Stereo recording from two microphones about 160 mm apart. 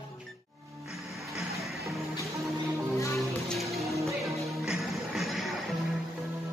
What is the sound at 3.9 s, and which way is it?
Music, 20° right (ahead or behind).